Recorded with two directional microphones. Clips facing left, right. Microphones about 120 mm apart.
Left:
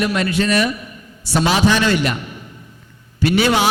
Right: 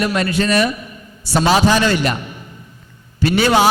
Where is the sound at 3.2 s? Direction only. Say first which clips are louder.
Right 1 dB; 40° right (ahead or behind).